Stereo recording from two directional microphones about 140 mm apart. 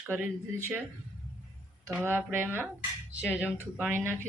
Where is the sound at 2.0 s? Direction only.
15° right (ahead or behind).